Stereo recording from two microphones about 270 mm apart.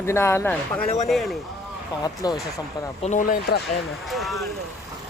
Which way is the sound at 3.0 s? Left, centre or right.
Left.